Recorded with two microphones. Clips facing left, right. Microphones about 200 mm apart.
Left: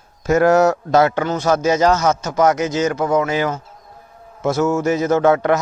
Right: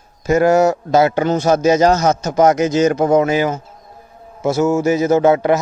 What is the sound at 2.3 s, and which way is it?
A man's voice, 15° right (ahead or behind).